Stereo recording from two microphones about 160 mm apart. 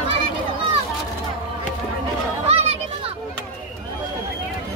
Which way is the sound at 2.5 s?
40° right (ahead or behind).